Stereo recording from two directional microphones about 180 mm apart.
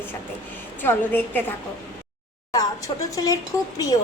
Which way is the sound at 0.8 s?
10° left (ahead or behind).